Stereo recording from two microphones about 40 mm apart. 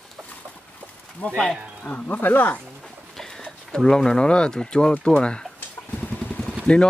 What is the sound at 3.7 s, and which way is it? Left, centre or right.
Speech, centre.